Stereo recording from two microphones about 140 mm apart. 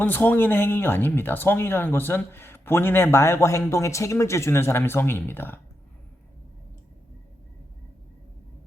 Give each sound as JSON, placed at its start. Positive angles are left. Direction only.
{"t": 0.0, "sound": "speech", "side_deg": 15}